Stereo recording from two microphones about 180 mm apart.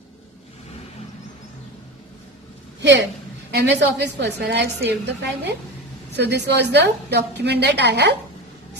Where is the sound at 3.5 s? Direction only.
70° right (ahead or behind).